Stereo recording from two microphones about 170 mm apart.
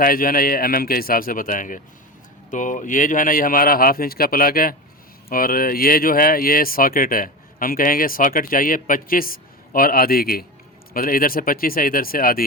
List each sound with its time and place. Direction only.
0.0 s speech: 55° left (ahead or behind)